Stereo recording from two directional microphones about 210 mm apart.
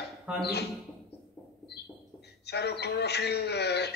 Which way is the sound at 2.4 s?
50° left (ahead or behind).